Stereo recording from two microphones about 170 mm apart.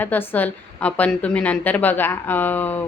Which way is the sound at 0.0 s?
10° left (ahead or behind).